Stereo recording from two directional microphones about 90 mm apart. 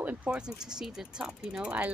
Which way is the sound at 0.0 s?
15° right (ahead or behind).